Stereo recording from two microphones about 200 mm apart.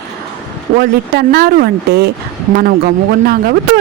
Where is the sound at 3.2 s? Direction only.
50° right (ahead or behind).